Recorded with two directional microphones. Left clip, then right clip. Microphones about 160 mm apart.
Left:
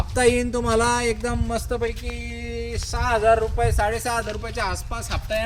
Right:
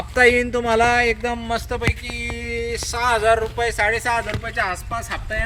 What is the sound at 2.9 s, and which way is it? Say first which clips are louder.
Speech: right 1 dB; 55° left (ahead or behind).